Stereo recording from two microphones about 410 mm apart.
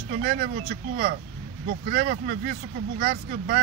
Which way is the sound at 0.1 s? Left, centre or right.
Centre.